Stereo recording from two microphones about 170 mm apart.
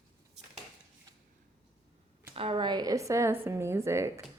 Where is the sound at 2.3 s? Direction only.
30° right (ahead or behind).